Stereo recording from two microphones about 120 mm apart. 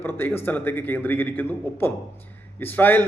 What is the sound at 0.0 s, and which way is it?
A man's voice, 15° left (ahead or behind).